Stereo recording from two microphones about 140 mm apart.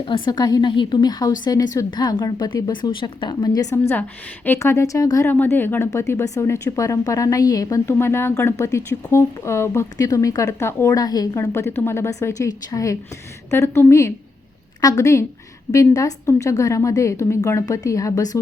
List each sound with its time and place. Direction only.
0.0 s a woman's voice: 35° left (ahead or behind)